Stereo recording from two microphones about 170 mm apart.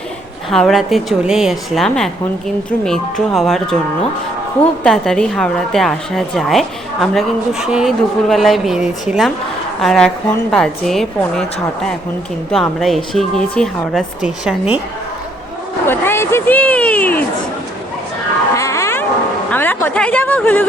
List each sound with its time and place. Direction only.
0.5 s a woman's voice: centre (ahead or behind)
4.8 s a woman's voice: 5° left (ahead or behind)
12.5 s a woman's voice: centre (ahead or behind)
15.9 s speech: 15° left (ahead or behind)
18.5 s music: 15° left (ahead or behind)
19.5 s a woman's voice: 10° left (ahead or behind)